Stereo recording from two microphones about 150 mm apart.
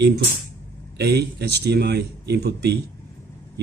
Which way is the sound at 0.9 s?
90° right.